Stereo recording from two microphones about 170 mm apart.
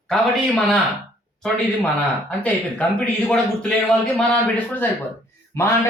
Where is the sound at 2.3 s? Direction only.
10° left (ahead or behind).